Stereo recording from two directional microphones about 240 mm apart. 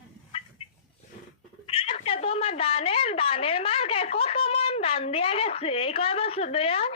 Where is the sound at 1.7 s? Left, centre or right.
Left.